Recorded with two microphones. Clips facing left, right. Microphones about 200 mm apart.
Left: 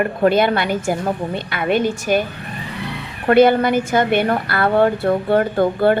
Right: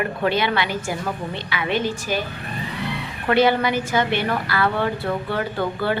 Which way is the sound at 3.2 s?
50° left (ahead or behind).